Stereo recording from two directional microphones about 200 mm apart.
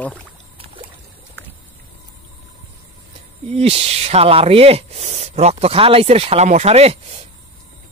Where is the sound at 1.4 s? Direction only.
10° left (ahead or behind).